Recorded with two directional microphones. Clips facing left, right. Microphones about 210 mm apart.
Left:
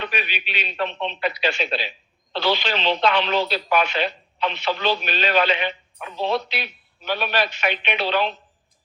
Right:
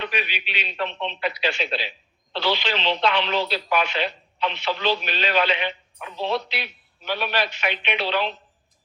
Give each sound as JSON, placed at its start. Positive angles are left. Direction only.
{"t": 0.0, "sound": "speech", "side_deg": 45}